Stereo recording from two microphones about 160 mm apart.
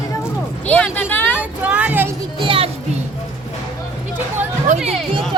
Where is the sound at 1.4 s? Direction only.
10° right (ahead or behind).